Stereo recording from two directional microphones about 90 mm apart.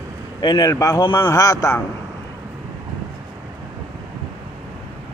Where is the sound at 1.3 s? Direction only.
40° left (ahead or behind).